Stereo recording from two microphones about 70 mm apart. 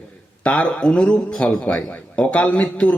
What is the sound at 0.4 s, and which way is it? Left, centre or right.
A man's voice, centre.